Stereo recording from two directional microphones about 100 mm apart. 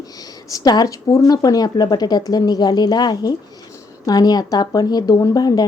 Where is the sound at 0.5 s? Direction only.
40° left (ahead or behind).